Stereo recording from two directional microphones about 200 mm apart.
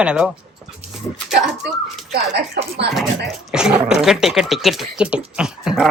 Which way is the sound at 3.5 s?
5° right (ahead or behind).